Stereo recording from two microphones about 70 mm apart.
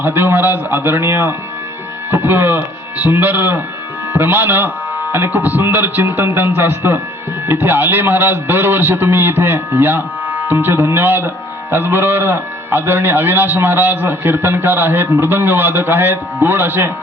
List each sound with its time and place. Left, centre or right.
0.0 s a man's voice: right